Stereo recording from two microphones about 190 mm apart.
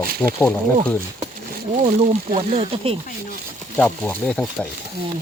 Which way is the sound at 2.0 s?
30° right (ahead or behind).